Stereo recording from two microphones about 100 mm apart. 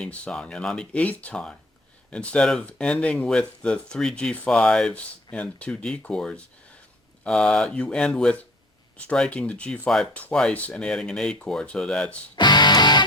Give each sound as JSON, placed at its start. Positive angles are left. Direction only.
{"t": 0.0, "sound": "speech", "side_deg": 10}
{"t": 12.4, "sound": "music", "side_deg": 45}